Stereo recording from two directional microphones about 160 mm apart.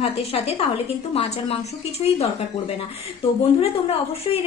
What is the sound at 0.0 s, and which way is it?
A woman's voice, 40° left (ahead or behind).